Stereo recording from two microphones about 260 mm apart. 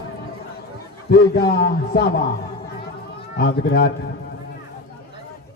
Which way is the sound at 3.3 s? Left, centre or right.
Left.